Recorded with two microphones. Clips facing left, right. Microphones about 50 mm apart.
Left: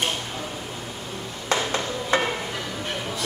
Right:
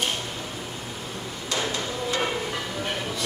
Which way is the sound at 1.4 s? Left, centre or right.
Left.